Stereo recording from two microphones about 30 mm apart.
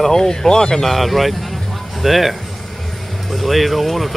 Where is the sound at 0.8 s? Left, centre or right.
Centre.